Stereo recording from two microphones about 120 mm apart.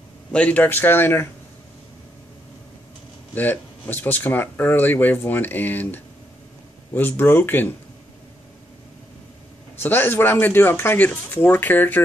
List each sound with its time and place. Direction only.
0.3 s speech: 10° left (ahead or behind)
3.3 s speech: 15° left (ahead or behind)
9.8 s speech: 15° left (ahead or behind)